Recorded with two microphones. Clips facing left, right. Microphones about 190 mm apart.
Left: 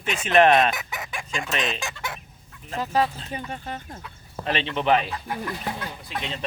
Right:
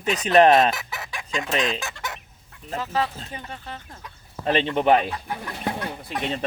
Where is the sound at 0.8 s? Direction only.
20° left (ahead or behind).